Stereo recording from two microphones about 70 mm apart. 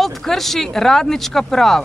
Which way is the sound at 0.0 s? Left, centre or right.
Centre.